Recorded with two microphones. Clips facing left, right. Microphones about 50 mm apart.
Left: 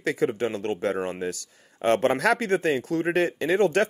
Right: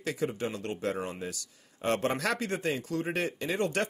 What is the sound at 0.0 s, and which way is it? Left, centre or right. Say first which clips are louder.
A man's voice: left 7 dB; left.